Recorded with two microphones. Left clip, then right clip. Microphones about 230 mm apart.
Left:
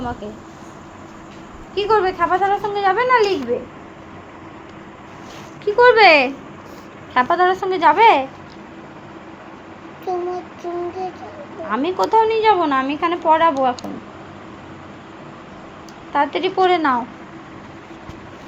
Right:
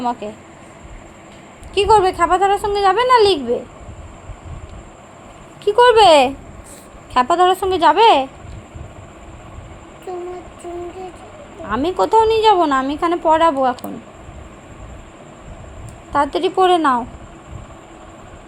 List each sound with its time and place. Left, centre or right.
0.0 s a woman's voice: right
1.7 s a woman's voice: right
5.6 s a woman's voice: right
11.7 s a woman's voice: right
16.1 s a woman's voice: right